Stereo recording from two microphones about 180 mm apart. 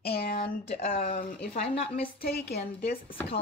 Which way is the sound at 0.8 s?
45° left (ahead or behind).